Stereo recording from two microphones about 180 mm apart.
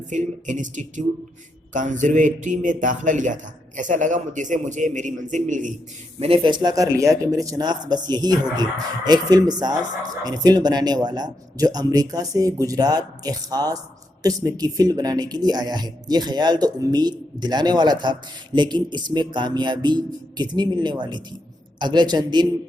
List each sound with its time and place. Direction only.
0.1 s speech: 45° right (ahead or behind)
6.1 s speech: 30° right (ahead or behind)